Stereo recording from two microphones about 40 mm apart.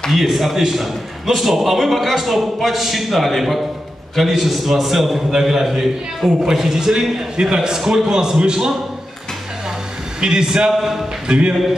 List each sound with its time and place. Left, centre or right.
0.1 s a man's voice: centre
10.2 s a man's voice: centre
10.8 s a man's voice: centre
11.2 s a man's voice: right